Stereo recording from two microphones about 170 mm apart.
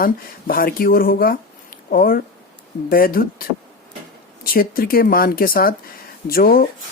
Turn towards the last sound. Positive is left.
turn(degrees=60)  # may be behind; listen again after turning